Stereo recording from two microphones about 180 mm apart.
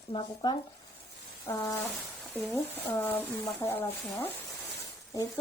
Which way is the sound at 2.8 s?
15° left (ahead or behind).